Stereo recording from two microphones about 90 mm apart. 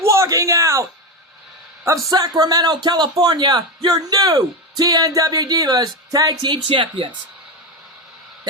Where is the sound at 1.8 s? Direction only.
35° right (ahead or behind).